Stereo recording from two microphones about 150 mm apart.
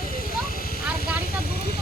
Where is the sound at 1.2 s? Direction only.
90° left.